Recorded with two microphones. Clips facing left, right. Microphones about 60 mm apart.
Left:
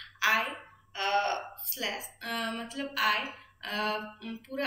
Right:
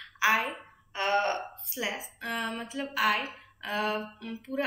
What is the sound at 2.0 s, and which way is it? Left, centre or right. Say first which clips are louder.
A woman's voice: right 1 dB; centre.